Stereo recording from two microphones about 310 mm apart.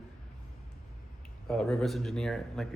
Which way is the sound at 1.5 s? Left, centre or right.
Centre.